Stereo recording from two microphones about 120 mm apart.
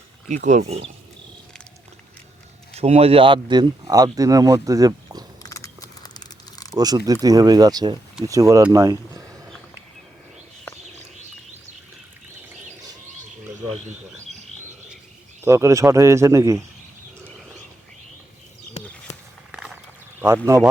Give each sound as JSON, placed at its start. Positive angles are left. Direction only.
{"t": 0.3, "sound": "speech", "side_deg": -85}
{"t": 2.7, "sound": "speech", "side_deg": -60}
{"t": 5.4, "sound": "a sound", "side_deg": 25}
{"t": 6.7, "sound": "speech", "side_deg": -35}
{"t": 15.4, "sound": "speech", "side_deg": -25}
{"t": 19.5, "sound": "a sound", "side_deg": -5}
{"t": 20.2, "sound": "speech", "side_deg": -20}